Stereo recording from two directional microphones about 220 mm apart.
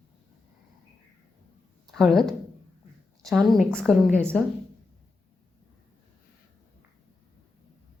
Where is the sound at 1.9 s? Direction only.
Centre (ahead or behind).